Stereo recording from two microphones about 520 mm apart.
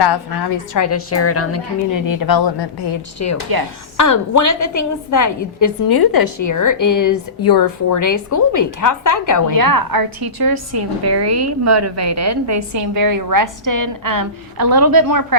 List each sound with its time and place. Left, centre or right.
0.0 s a woman's voice: left
9.6 s a woman's voice: right
11.2 s a woman's voice: right